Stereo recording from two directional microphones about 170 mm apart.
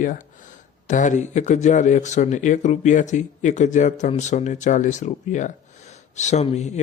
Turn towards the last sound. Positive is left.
turn(degrees=40)  # may be behind; listen again after turning